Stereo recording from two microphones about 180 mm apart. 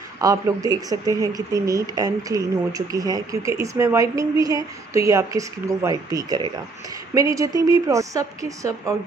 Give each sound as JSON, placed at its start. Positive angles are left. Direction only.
{"t": 0.2, "sound": "speech", "side_deg": -20}